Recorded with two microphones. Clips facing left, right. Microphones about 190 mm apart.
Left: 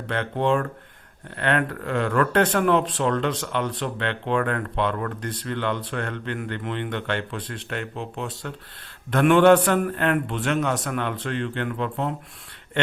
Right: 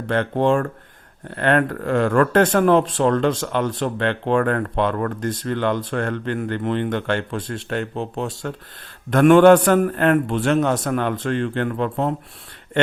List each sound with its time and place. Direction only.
0.1 s speech: 45° right (ahead or behind)